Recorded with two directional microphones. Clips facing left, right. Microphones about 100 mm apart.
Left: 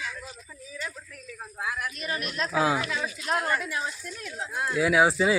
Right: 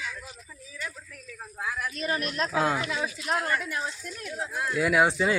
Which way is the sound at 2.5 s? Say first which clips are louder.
Left 3 dB; 5° left (ahead or behind).